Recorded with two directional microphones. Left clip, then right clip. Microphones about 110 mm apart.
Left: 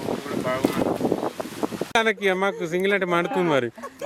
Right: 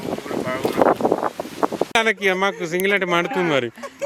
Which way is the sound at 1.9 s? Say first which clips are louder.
Right 1 dB; 10° right (ahead or behind).